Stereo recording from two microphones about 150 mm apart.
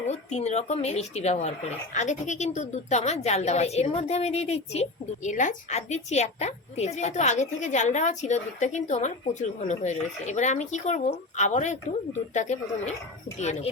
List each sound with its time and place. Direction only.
0.1 s speech: 50° left (ahead or behind)